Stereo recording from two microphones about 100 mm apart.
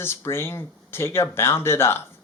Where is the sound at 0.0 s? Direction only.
25° left (ahead or behind).